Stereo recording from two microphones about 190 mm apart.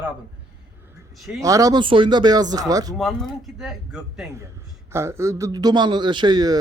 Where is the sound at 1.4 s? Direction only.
15° right (ahead or behind).